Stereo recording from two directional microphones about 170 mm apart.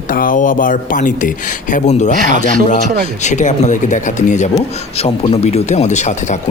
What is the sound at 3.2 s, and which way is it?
Speech, 45° left (ahead or behind).